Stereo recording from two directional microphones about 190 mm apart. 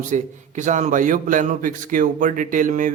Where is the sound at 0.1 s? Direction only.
40° right (ahead or behind).